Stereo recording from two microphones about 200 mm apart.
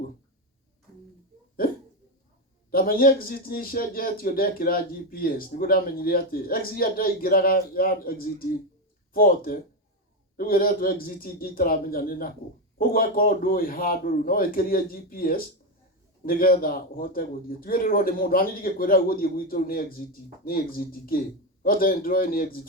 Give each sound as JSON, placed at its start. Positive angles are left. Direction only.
{"t": 2.7, "sound": "a man's voice", "side_deg": 45}